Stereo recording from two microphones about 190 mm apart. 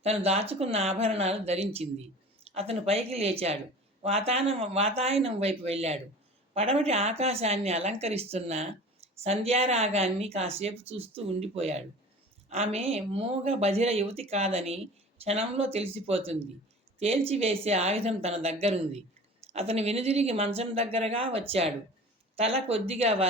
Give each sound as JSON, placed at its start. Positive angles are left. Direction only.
{"t": 0.0, "sound": "speech", "side_deg": -35}